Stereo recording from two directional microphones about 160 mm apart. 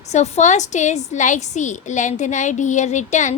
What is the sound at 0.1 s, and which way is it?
A woman's voice, 45° left (ahead or behind).